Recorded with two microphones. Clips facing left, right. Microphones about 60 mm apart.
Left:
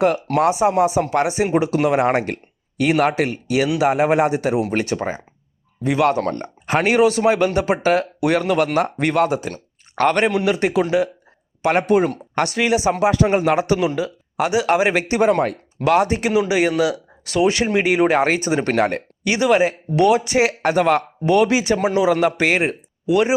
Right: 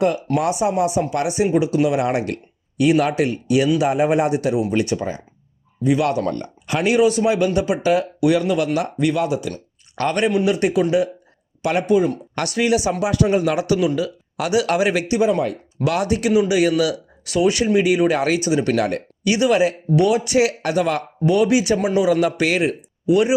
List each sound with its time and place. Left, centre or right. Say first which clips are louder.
0.3 s speech: left 5 dB; left
4.6 s speech: right 1 dB; left
11.9 s speech: even; left
12.3 s speech: left 2 dB; left
15.2 s speech: left 4 dB; left
15.9 s speech: left 2 dB; left